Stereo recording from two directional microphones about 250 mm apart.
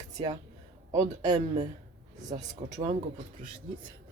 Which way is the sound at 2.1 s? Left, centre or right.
Right.